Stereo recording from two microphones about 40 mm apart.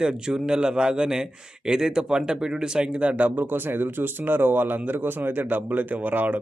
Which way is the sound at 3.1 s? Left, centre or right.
Right.